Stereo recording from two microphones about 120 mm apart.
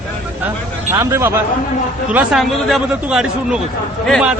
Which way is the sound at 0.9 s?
20° right (ahead or behind).